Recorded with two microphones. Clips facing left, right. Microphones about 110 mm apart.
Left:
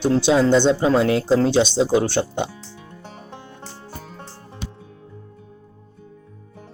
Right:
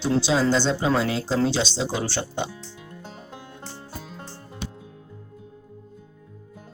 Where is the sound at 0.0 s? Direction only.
55° left (ahead or behind).